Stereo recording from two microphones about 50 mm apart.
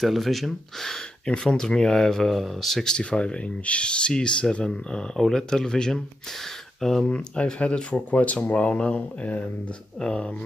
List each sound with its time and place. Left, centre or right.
0.0 s speech: centre
1.2 s speech: centre
7.1 s speech: left
9.9 s speech: centre